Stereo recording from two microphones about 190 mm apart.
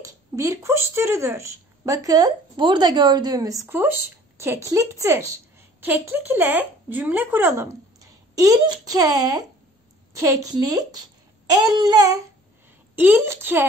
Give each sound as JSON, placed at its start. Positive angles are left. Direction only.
{"t": 0.0, "sound": "a woman's voice", "side_deg": -15}